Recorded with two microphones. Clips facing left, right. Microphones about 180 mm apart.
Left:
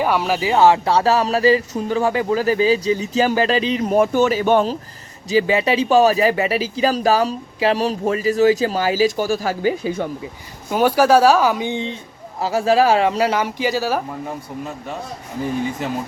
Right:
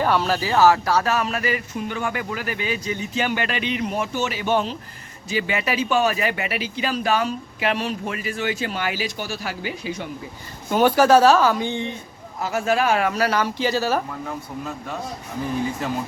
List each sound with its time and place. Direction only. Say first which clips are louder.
0.0 s speech: left 2 dB; 10° left (ahead or behind); by 3.9 s 35° left (ahead or behind)
3.9 s speech: left 10 dB; 50° left (ahead or behind)
5.3 s speech: left 8 dB; 35° left (ahead or behind)
10.7 s speech: left 1 dB; 5° left (ahead or behind)
12.4 s speech: left 6 dB; 30° left (ahead or behind); by 14.0 s 10° left (ahead or behind)